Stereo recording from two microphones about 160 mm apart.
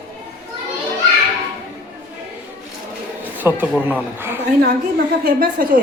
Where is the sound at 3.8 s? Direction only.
10° right (ahead or behind).